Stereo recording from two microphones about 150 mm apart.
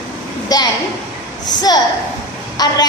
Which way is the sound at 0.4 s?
25° left (ahead or behind).